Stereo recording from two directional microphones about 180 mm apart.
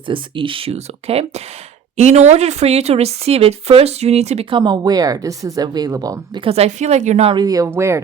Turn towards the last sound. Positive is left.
turn(degrees=-15)  # may be behind; listen again after turning